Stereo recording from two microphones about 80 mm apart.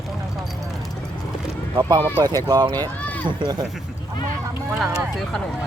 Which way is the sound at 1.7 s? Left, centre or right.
Right.